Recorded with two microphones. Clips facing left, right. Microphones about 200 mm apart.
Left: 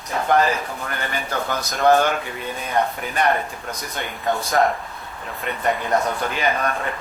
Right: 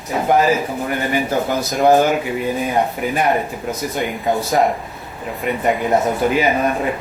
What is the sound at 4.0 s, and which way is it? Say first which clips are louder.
Speech: right 4 dB; 20° right (ahead or behind).